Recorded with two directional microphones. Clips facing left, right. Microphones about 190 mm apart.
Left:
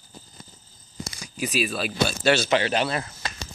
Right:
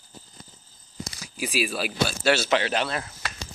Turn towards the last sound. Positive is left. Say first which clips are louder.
# left 2 dB
turn(degrees=0)  # may be behind; listen again after turning